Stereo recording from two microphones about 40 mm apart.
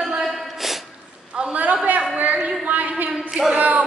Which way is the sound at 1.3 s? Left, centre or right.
Right.